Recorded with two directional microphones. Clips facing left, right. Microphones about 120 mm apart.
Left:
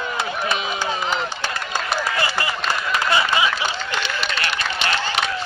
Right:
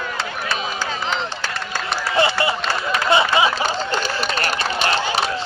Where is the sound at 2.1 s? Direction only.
25° right (ahead or behind).